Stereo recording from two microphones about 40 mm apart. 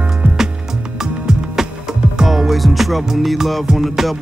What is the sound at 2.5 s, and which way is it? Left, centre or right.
Music, centre.